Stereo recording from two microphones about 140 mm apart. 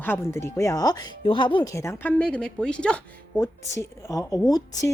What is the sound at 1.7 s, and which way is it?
Speech, 20° left (ahead or behind).